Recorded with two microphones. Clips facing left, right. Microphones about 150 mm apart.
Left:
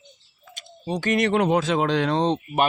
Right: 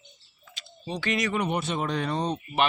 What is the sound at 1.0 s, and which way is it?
Speech, 50° left (ahead or behind).